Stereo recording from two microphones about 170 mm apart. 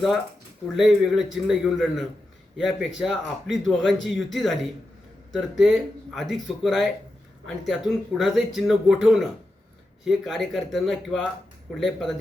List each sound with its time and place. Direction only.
0.7 s speech: centre (ahead or behind)